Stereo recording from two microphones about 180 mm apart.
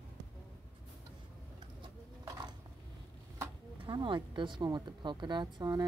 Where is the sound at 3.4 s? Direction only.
25° right (ahead or behind).